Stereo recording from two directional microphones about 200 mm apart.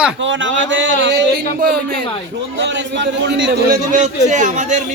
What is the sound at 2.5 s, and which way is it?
Speech, 60° right (ahead or behind).